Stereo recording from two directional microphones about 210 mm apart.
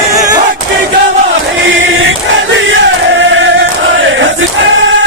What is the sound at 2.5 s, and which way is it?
Chant, 65° right (ahead or behind).